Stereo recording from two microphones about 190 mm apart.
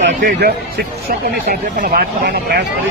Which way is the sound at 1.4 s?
50° right (ahead or behind).